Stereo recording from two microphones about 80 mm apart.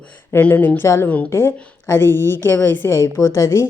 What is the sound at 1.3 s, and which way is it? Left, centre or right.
A woman's voice, left.